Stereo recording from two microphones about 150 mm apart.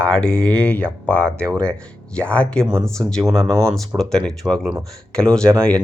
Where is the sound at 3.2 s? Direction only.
20° right (ahead or behind).